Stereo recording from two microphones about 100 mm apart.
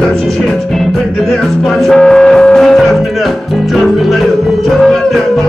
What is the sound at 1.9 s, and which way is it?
Music, 5° left (ahead or behind).